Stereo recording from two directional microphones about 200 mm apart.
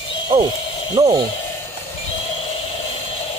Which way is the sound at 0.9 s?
15° right (ahead or behind).